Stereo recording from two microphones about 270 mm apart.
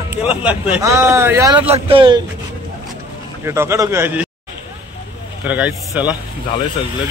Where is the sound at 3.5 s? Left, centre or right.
Centre.